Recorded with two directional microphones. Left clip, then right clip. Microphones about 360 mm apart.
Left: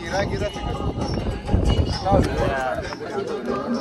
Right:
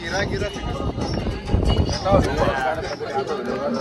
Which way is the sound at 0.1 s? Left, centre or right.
Left.